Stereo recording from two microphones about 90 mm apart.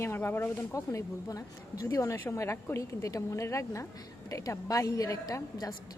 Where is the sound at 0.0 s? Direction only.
25° left (ahead or behind).